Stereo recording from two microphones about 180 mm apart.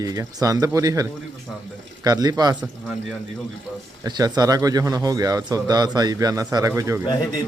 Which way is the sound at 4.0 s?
20° right (ahead or behind).